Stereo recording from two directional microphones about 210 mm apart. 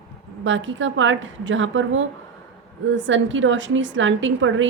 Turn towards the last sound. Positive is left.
turn(degrees=-65)  # may be behind; listen again after turning